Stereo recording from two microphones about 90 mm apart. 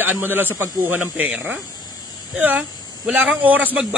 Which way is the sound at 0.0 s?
20° right (ahead or behind).